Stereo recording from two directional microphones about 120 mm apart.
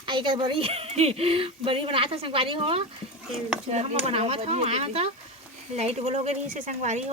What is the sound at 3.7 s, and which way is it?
Speech, 65° right (ahead or behind).